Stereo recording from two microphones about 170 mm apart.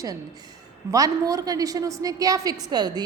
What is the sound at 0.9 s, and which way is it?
A woman's voice, 20° right (ahead or behind).